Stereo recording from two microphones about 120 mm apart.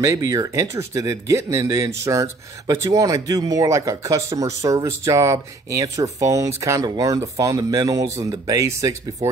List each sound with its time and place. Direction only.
0.0 s speech: 30° right (ahead or behind)